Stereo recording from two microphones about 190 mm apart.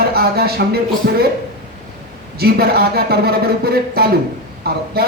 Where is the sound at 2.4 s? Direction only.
55° right (ahead or behind).